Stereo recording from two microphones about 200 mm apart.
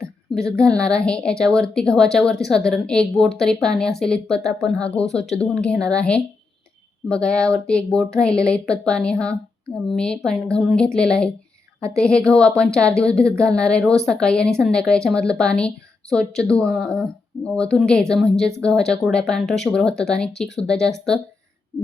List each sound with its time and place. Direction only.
0.3 s speech: 5° left (ahead or behind)